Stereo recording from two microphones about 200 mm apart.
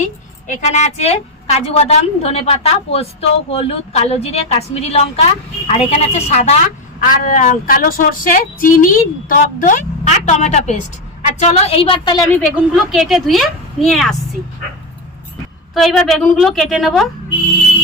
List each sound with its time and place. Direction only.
0.4 s a woman's voice: 35° left (ahead or behind); by 12.3 s 20° left (ahead or behind)
12.5 s a woman's voice: centre (ahead or behind)
15.7 s a woman's voice: centre (ahead or behind)